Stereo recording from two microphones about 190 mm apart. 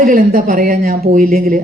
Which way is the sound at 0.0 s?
45° right (ahead or behind).